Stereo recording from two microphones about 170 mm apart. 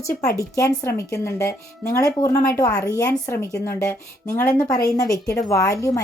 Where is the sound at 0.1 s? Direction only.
65° left (ahead or behind).